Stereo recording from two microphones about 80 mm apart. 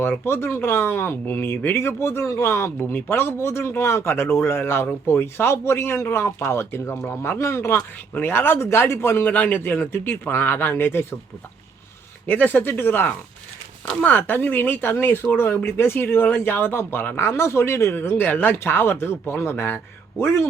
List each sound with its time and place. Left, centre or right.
0.0 s speech: left
12.2 s speech: left